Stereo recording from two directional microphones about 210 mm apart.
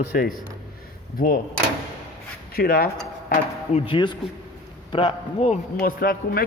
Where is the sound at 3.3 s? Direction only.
30° left (ahead or behind).